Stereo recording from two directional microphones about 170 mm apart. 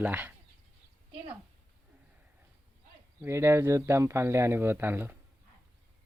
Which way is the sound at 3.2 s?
15° right (ahead or behind).